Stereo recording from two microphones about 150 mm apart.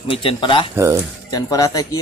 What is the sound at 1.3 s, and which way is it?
Speech, 25° left (ahead or behind).